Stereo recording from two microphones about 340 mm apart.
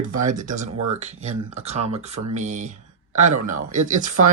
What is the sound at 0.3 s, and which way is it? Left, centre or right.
Speech, right.